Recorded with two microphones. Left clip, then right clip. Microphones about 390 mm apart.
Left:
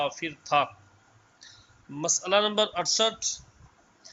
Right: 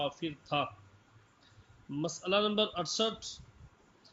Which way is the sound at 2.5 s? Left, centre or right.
Left.